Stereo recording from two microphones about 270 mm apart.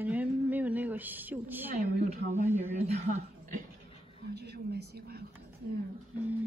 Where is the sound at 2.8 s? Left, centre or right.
Right.